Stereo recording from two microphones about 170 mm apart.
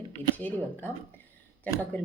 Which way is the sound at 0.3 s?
10° left (ahead or behind).